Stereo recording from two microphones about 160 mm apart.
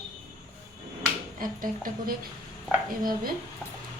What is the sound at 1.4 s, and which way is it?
Speech, 60° right (ahead or behind).